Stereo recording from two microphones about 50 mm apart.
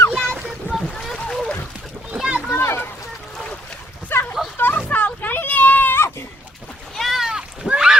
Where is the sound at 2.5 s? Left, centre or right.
Left.